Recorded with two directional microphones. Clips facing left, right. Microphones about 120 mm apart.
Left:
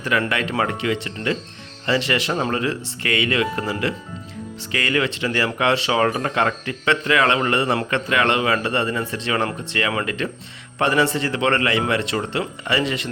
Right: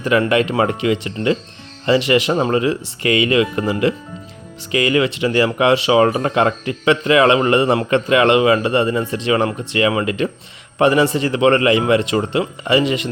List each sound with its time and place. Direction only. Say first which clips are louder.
0.0 s speech: right 7 dB; 20° right (ahead or behind)